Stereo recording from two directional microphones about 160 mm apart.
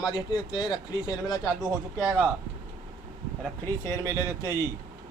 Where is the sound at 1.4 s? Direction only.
Centre (ahead or behind).